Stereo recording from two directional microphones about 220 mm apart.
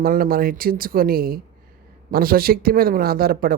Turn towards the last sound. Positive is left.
turn(degrees=-40)  # may be behind; listen again after turning